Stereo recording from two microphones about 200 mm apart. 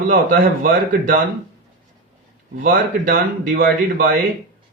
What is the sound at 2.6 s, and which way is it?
Speech, 45° right (ahead or behind).